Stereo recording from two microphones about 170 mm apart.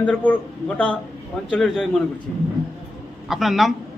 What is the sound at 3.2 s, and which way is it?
Speech, centre (ahead or behind).